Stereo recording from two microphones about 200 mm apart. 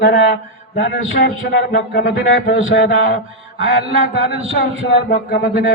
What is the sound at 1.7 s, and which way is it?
A man's voice, 45° left (ahead or behind).